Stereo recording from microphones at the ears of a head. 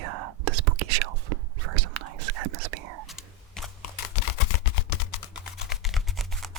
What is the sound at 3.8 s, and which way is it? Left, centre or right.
Typing, left.